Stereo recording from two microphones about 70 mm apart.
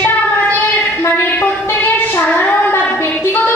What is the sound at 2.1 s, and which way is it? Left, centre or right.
Child singing, left.